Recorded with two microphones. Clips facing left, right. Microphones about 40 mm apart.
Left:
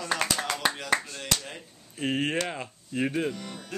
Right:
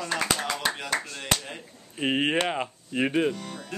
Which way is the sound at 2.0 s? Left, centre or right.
Right.